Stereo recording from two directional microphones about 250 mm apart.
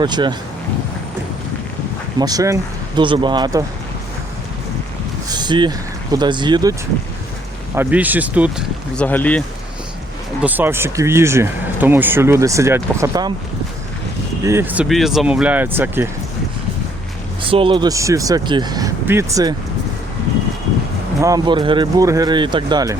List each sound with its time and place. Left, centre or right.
0.0 s speech: centre
2.1 s speech: centre
5.3 s speech: centre
7.8 s speech: centre
10.4 s speech: centre
14.4 s speech: centre
17.4 s speech: right
21.2 s speech: centre